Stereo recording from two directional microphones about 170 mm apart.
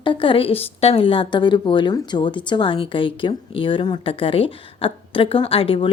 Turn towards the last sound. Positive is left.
turn(degrees=30)  # may be behind; listen again after turning